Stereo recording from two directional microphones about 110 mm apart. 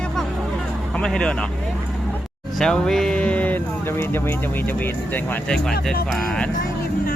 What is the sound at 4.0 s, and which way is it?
Speech, 20° left (ahead or behind).